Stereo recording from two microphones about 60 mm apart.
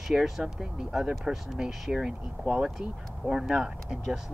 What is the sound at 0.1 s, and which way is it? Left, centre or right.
Speech, centre.